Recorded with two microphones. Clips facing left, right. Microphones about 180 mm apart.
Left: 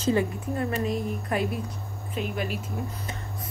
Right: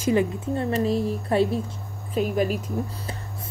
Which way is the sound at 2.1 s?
40° right (ahead or behind).